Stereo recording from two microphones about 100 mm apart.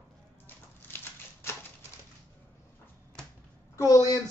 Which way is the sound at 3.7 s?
35° left (ahead or behind).